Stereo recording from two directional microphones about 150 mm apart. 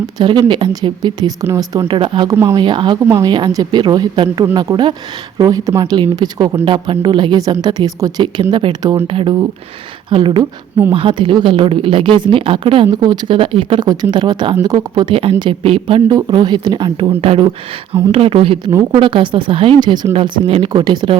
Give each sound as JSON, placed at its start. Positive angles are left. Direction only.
{"t": 0.2, "sound": "a woman's voice", "side_deg": -30}